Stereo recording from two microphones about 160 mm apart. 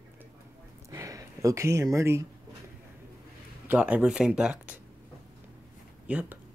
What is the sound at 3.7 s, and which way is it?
Speech, 10° right (ahead or behind).